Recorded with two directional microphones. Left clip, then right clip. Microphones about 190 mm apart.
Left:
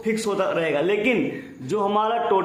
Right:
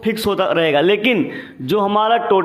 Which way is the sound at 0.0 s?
40° right (ahead or behind).